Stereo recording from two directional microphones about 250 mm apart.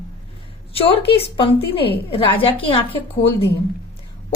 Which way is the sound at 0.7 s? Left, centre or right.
Left.